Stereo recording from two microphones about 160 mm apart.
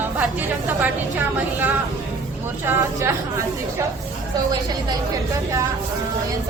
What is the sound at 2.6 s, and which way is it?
Speech, 15° right (ahead or behind).